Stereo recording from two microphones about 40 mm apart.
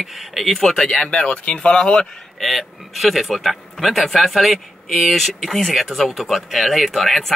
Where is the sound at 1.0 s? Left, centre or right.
Left.